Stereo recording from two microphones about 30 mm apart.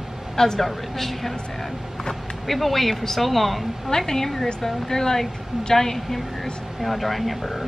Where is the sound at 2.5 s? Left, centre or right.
Centre.